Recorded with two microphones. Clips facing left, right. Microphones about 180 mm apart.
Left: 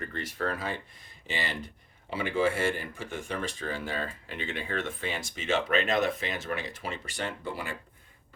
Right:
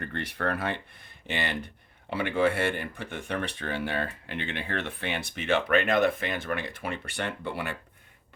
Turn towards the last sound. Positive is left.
turn(degrees=-65)  # may be behind; listen again after turning